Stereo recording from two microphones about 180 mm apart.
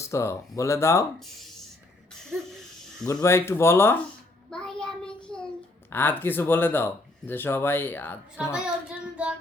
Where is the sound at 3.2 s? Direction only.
15° left (ahead or behind).